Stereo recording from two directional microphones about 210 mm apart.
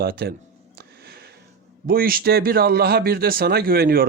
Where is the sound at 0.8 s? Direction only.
50° right (ahead or behind).